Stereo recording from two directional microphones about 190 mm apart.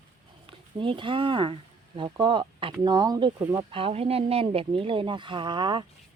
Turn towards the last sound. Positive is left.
turn(degrees=-25)  # may be behind; listen again after turning